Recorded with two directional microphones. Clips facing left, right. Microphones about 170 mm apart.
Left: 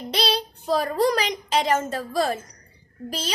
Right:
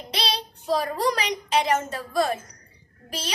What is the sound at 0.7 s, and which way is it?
A woman's voice, 35° left (ahead or behind).